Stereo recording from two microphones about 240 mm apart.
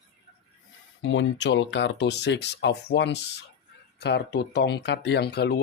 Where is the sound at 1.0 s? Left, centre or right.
Left.